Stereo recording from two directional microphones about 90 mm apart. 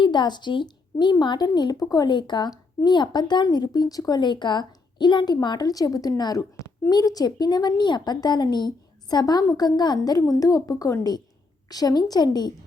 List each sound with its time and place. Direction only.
0.0 s a woman's voice: 55° left (ahead or behind)